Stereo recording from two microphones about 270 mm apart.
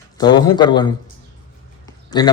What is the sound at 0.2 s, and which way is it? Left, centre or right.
Speech, centre.